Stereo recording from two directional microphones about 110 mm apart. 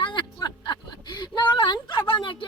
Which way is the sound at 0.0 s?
50° left (ahead or behind).